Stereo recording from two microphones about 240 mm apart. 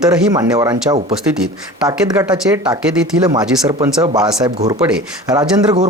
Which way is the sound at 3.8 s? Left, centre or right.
Centre.